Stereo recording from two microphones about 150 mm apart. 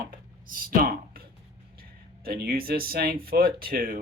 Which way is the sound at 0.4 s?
70° right (ahead or behind).